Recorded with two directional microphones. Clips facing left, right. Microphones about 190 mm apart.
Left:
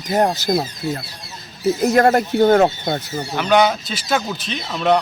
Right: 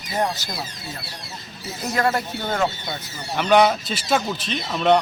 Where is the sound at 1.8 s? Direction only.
50° left (ahead or behind).